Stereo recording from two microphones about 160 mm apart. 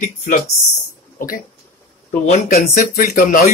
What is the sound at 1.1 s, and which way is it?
Speech, 60° left (ahead or behind).